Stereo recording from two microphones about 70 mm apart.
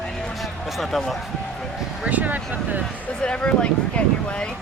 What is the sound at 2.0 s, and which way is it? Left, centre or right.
Speech, right.